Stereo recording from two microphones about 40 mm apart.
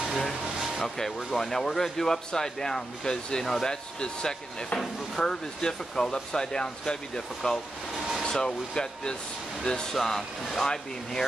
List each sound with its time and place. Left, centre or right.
0.3 s a sound: centre
0.8 s speech: centre
9.9 s speech: centre